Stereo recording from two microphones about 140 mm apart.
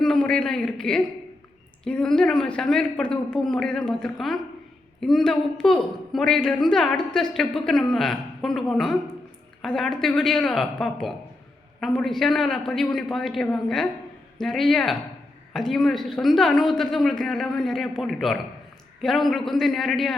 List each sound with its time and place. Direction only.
0.0 s a man's voice: 5° left (ahead or behind)